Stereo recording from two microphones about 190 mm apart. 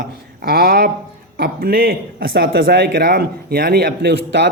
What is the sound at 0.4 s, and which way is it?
A man's voice, 55° right (ahead or behind).